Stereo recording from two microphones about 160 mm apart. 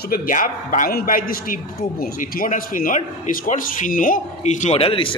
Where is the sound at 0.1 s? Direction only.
60° left (ahead or behind).